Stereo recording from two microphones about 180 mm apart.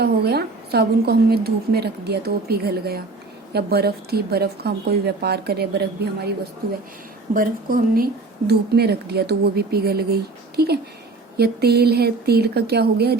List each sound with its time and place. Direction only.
0.0 s a woman's voice: 65° right (ahead or behind)
7.3 s speech: 50° right (ahead or behind)
8.4 s a woman's voice: 65° right (ahead or behind)